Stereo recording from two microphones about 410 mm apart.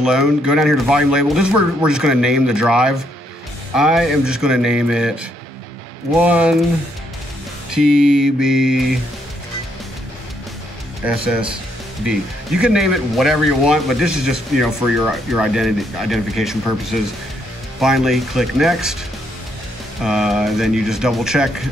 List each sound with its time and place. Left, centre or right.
0.0 s speech: centre
7.7 s speech: centre
12.1 s speech: centre
20.0 s speech: centre